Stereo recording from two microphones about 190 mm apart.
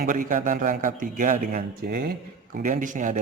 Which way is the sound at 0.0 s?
45° right (ahead or behind).